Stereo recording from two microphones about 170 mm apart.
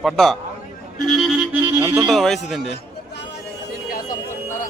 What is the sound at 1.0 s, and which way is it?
Music, centre (ahead or behind).